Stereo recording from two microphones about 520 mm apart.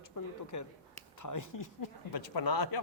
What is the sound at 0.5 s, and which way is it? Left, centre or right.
Speech, left.